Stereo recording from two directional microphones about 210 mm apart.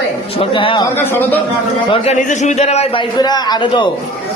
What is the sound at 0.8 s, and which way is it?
Speech, 10° left (ahead or behind).